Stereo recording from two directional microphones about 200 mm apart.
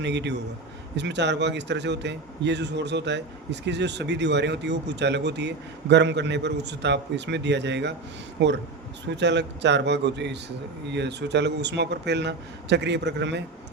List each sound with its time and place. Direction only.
0.0 s a man's voice: 60° right (ahead or behind)